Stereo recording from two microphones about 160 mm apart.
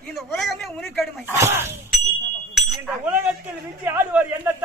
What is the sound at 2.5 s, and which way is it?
Chink, centre (ahead or behind).